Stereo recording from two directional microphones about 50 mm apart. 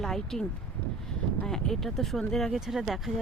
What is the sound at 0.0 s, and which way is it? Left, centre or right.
Speech, centre.